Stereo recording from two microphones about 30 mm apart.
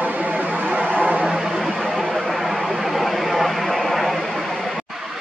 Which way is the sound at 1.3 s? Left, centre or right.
Centre.